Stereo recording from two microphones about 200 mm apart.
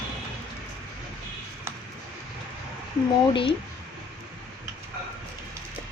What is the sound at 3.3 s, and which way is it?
Speech, 25° left (ahead or behind).